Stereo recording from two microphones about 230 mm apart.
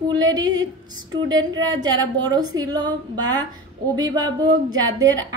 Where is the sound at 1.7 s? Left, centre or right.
Centre.